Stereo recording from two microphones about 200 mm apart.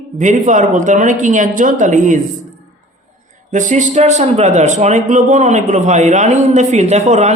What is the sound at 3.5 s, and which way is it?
Speech, 35° right (ahead or behind).